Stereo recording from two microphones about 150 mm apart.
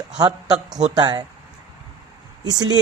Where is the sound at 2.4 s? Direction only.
25° right (ahead or behind).